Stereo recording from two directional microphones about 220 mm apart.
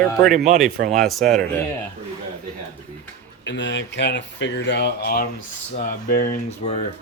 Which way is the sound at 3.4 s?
55° left (ahead or behind).